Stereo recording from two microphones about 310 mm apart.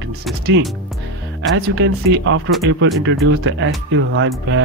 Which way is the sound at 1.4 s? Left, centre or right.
Right.